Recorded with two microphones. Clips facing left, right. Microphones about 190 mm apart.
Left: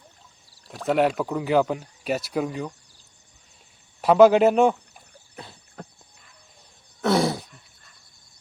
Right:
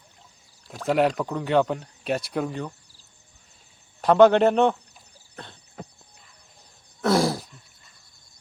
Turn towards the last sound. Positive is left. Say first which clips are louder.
# even
turn(degrees=0)  # may be behind; listen again after turning